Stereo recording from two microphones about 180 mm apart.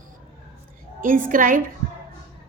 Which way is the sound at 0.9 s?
50° right (ahead or behind).